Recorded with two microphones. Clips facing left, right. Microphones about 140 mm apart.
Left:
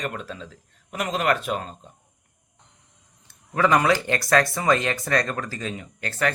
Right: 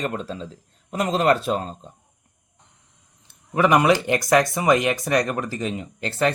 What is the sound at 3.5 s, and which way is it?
Speech, 20° right (ahead or behind).